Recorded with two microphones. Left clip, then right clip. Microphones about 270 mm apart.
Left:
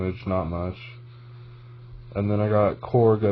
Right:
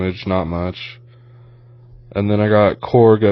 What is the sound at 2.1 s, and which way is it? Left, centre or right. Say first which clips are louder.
A man's voice: right 8 dB; right.